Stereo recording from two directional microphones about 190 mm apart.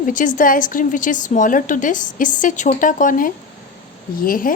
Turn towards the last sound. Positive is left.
turn(degrees=45)  # may be behind; listen again after turning